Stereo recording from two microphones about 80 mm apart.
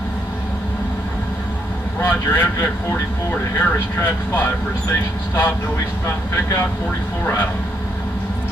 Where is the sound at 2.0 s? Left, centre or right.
Left.